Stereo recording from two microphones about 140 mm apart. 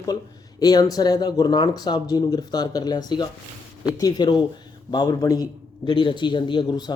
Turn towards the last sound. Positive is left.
turn(degrees=30)  # may be behind; listen again after turning